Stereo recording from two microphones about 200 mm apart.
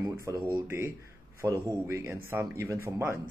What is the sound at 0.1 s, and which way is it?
Speech, 15° right (ahead or behind).